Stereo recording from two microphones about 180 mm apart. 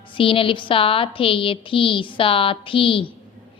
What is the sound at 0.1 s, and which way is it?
A woman's voice, 30° left (ahead or behind).